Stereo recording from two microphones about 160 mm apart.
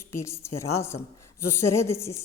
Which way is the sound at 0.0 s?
15° left (ahead or behind).